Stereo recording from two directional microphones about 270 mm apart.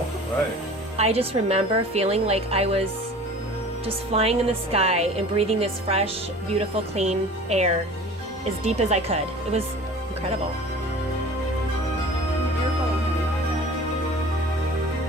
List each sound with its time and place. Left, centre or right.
0.9 s speech: right
3.8 s speech: right